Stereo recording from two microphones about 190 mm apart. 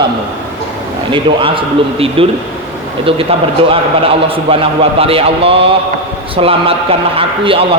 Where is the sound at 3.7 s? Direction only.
30° right (ahead or behind).